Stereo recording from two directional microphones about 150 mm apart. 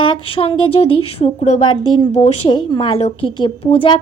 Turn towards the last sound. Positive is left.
turn(degrees=40)  # may be behind; listen again after turning